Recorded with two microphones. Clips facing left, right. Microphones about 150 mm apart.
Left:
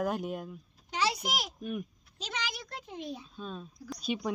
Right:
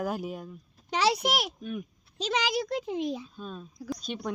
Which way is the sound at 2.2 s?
90° right.